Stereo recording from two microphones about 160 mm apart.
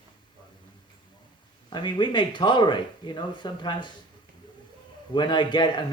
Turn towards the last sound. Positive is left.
turn(degrees=30)  # may be behind; listen again after turning